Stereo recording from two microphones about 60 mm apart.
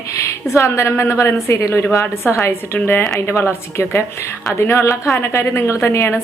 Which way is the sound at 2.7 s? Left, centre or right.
Left.